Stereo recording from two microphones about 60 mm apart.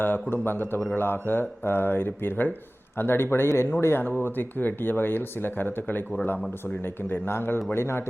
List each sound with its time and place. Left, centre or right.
0.0 s speech: left